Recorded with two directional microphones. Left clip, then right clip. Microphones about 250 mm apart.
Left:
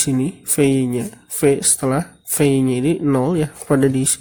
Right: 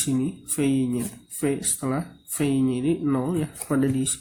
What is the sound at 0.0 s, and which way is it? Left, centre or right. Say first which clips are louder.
Speech: left 6 dB; left.